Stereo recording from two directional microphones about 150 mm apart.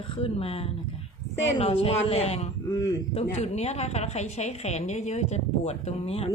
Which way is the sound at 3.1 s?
45° left (ahead or behind).